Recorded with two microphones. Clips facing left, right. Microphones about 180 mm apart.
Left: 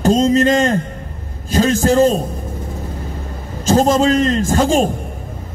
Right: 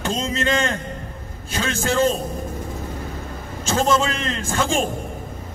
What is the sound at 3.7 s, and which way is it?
A man's voice, 40° left (ahead or behind).